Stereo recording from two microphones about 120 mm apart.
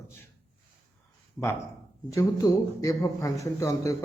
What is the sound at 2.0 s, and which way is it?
A man's voice, 30° left (ahead or behind).